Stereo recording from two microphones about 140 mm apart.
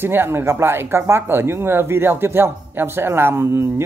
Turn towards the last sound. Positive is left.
turn(degrees=-20)  # may be behind; listen again after turning